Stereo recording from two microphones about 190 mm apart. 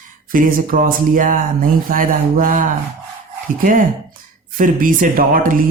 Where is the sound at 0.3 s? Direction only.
45° right (ahead or behind).